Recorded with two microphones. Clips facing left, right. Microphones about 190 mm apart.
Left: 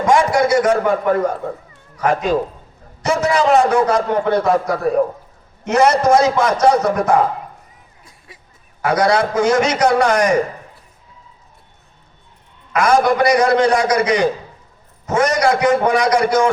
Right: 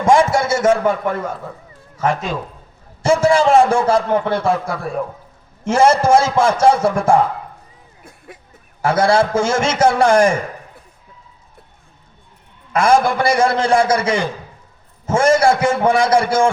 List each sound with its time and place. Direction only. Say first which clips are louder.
0.0 s a sound: even; 25° right (ahead or behind)
0.7 s a man's voice: left 1 dB; 45° left (ahead or behind)
3.0 s a man's voice: right 3 dB; 30° right (ahead or behind)
4.3 s a man's voice: left 3 dB; 45° left (ahead or behind)
5.6 s a man's voice: even; 30° right (ahead or behind)
8.8 s a man's voice: right 1 dB; 25° right (ahead or behind)
12.7 s a man's voice: even; 25° right (ahead or behind)